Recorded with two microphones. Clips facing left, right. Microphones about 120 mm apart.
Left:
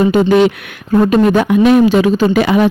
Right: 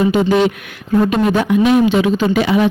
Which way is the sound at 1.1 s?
45° left (ahead or behind).